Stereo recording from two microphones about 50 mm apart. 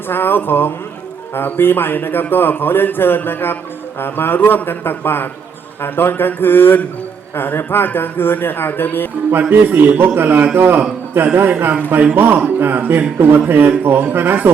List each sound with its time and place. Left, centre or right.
0.1 s a man's voice: left
9.4 s speech: right